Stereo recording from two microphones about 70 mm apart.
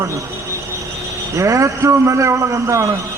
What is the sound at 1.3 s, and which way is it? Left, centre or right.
A man's voice, right.